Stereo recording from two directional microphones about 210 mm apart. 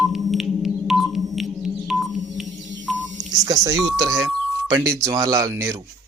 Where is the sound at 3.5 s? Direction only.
15° right (ahead or behind).